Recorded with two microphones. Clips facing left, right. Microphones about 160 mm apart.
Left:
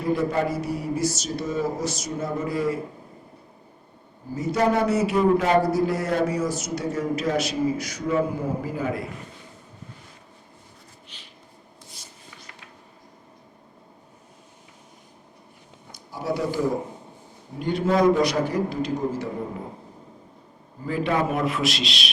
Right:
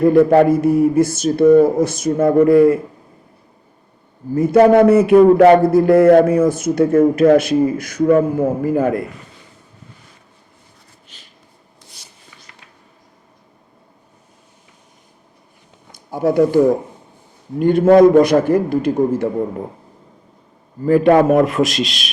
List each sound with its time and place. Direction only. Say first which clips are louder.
0.0 s speech: right 13 dB; 55° right (ahead or behind)
4.4 s speech: right 12 dB; 55° right (ahead or behind)
11.1 s a sound: right 3 dB; 45° right (ahead or behind)
12.0 s writing: even; 75° right (ahead or behind)
15.9 s speech: right 10 dB; 50° right (ahead or behind)
20.8 s speech: right 13 dB; 50° right (ahead or behind)